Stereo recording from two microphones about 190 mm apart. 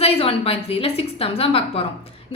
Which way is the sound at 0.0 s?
30° left (ahead or behind).